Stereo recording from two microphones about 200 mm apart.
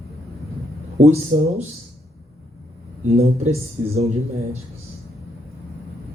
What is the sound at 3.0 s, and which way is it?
Speech, 30° right (ahead or behind).